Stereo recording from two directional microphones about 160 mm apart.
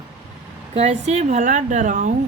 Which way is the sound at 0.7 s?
45° right (ahead or behind).